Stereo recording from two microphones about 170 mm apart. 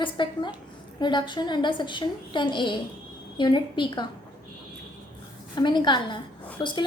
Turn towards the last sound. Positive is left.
turn(degrees=30)  # may be behind; listen again after turning